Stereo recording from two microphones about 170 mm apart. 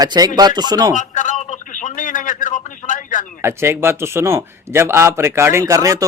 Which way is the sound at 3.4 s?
15° right (ahead or behind).